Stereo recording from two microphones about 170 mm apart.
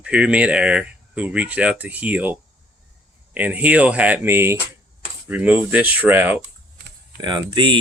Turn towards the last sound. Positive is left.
turn(degrees=-30)  # may be behind; listen again after turning